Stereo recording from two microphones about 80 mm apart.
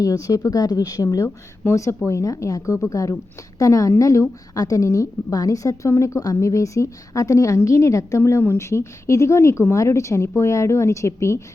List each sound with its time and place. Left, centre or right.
0.0 s a woman's voice: left